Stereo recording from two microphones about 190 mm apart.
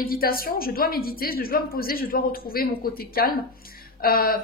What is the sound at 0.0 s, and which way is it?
A woman's voice, 50° left (ahead or behind).